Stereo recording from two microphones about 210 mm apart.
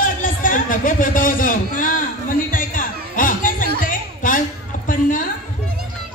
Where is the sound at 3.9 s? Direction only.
40° left (ahead or behind).